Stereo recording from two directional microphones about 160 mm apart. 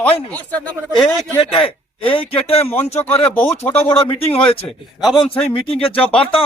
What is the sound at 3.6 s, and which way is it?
Speech, 40° left (ahead or behind).